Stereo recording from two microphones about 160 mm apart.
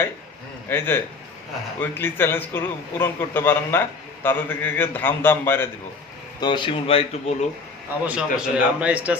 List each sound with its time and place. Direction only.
0.7 s a man's voice: 15° left (ahead or behind)
6.4 s speech: 30° left (ahead or behind)
8.0 s a man's voice: 5° right (ahead or behind)